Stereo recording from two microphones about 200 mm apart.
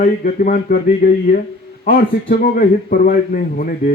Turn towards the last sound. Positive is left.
turn(degrees=45)  # may be behind; listen again after turning